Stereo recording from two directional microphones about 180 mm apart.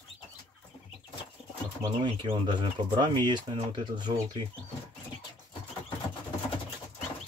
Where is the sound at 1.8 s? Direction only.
30° right (ahead or behind).